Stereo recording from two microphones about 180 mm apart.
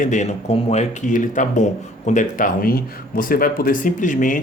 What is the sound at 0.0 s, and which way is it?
Speech, 40° left (ahead or behind).